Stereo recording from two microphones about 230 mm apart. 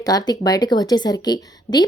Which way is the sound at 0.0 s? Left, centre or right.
Centre.